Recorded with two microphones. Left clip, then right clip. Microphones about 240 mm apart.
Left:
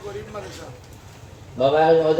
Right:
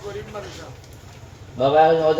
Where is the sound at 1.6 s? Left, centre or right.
Left.